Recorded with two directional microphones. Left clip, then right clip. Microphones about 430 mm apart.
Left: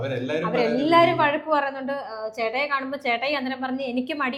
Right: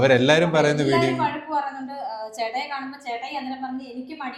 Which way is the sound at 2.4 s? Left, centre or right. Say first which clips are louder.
Left 4 dB; left.